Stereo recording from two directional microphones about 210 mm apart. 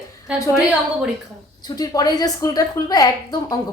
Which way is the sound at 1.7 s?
20° left (ahead or behind).